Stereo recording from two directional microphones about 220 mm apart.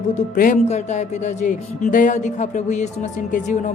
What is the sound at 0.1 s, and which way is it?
Speech, 35° left (ahead or behind).